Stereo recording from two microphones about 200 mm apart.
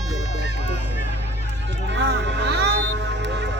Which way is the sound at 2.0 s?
60° right (ahead or behind).